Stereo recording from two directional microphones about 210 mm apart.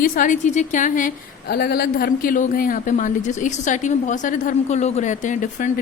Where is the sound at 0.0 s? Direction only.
40° left (ahead or behind).